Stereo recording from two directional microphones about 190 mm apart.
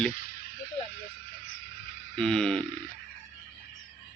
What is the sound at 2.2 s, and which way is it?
Speech, 5° left (ahead or behind).